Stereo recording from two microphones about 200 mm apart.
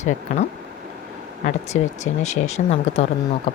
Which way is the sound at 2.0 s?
35° left (ahead or behind).